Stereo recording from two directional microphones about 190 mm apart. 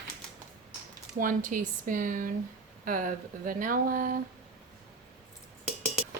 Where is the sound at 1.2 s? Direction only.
45° right (ahead or behind).